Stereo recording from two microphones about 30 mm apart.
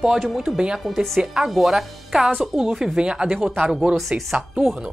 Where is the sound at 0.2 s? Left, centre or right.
Centre.